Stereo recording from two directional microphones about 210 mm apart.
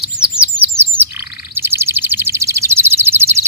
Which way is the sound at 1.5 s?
10° right (ahead or behind).